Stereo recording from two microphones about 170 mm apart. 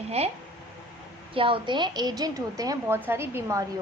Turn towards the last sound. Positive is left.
turn(degrees=-15)  # may be behind; listen again after turning